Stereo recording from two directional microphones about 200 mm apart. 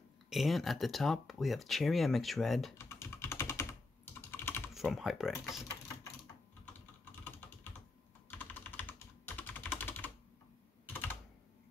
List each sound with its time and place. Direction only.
0.3 s speech: centre (ahead or behind)
2.8 s typing: 15° left (ahead or behind)
4.7 s speech: centre (ahead or behind)
8.3 s typing: 10° left (ahead or behind)
10.9 s computer keyboard: 10° left (ahead or behind)